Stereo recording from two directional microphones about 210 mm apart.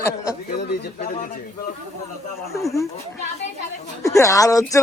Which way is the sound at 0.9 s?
35° left (ahead or behind).